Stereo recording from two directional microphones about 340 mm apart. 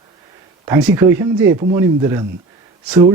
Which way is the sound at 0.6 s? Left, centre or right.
Centre.